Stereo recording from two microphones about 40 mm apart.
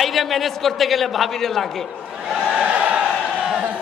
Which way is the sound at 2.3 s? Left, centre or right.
Right.